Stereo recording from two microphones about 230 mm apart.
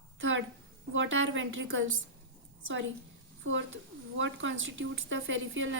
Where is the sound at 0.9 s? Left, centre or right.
Right.